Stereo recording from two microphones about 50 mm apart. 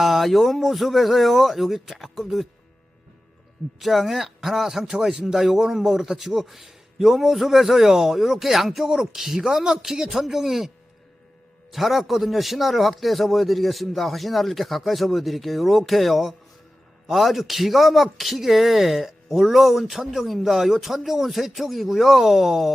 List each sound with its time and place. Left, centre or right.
0.0 s speech: centre
3.8 s a man's voice: centre
11.7 s speech: centre